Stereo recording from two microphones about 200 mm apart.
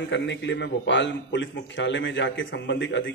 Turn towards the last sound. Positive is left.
turn(degrees=65)  # may be behind; listen again after turning